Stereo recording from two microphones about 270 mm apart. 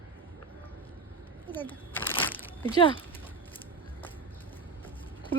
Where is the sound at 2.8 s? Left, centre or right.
Centre.